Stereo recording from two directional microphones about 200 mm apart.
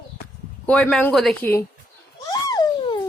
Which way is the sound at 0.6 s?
5° left (ahead or behind).